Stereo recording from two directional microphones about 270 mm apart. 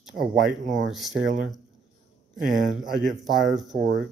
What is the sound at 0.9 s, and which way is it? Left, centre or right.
Speech, centre.